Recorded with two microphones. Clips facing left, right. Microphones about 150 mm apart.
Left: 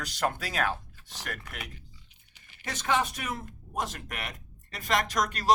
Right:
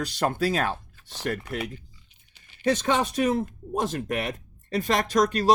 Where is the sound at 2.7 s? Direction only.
30° right (ahead or behind).